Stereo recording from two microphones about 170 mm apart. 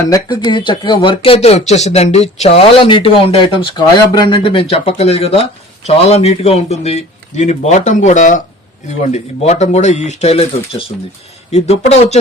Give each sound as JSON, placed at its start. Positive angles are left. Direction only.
{"t": 0.0, "sound": "speech", "side_deg": 25}